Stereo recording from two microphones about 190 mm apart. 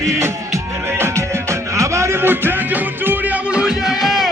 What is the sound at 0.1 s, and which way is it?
Music, 15° right (ahead or behind).